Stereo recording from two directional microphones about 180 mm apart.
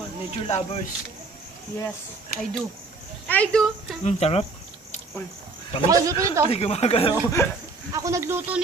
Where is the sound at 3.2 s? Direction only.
5° left (ahead or behind).